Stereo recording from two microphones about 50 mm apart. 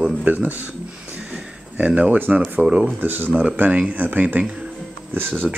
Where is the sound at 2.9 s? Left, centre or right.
Right.